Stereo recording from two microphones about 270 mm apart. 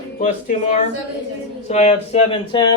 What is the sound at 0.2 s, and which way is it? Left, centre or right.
Speech, left.